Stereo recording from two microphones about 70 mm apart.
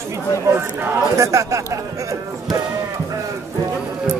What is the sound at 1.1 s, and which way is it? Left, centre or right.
Speech, right.